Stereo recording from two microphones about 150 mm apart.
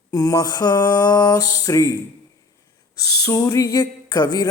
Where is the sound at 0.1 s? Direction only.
25° left (ahead or behind).